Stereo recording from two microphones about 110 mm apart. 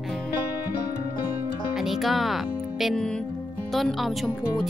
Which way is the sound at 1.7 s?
5° right (ahead or behind).